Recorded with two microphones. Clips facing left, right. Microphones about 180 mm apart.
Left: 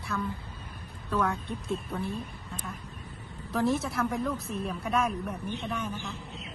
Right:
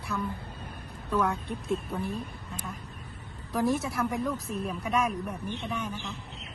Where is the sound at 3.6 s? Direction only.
15° right (ahead or behind).